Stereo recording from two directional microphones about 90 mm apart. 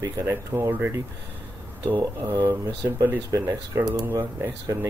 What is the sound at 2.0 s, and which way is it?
Speech, 50° right (ahead or behind).